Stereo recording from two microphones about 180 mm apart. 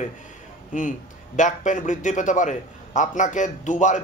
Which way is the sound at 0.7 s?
45° left (ahead or behind).